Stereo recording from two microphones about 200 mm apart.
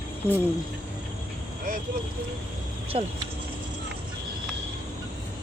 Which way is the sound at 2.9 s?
30° right (ahead or behind).